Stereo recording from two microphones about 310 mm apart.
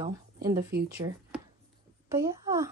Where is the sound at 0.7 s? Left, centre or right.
Right.